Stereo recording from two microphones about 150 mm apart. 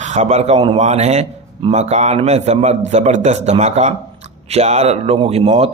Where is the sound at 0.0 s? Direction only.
50° right (ahead or behind).